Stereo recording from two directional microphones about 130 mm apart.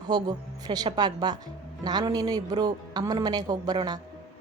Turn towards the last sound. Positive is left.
turn(degrees=-30)  # may be behind; listen again after turning